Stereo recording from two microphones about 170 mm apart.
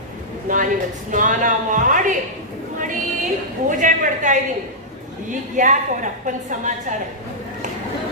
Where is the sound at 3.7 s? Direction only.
50° right (ahead or behind).